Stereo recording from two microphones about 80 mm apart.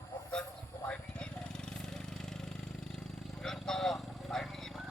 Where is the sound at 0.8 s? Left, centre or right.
Centre.